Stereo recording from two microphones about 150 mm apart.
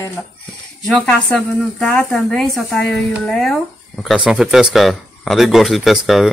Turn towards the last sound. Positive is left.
turn(degrees=0)  # may be behind; listen again after turning